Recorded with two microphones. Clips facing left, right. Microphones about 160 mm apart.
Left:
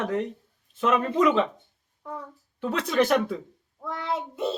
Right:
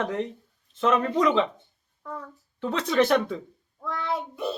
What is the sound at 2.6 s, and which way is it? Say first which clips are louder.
Speech: right 1 dB; 10° left (ahead or behind).